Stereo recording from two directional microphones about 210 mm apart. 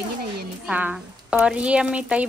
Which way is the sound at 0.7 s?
5° right (ahead or behind).